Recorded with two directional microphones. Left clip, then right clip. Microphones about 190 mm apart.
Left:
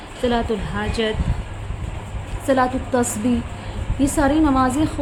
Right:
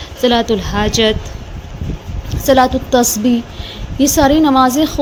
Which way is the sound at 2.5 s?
35° right (ahead or behind).